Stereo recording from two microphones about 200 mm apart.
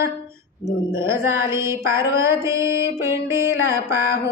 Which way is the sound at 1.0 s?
15° right (ahead or behind).